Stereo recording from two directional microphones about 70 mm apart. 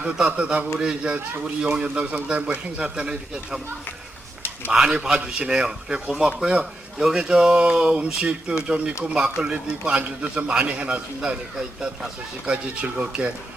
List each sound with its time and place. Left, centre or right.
0.0 s a man's voice: centre
4.7 s a man's voice: centre